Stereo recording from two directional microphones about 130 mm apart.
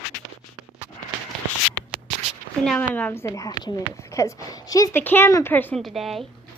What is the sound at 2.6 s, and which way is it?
Speech, 10° left (ahead or behind).